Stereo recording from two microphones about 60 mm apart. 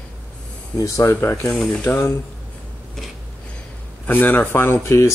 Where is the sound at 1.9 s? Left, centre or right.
Left.